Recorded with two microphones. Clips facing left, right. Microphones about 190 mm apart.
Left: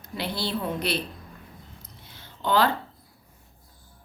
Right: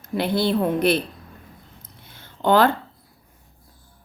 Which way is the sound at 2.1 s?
50° right (ahead or behind).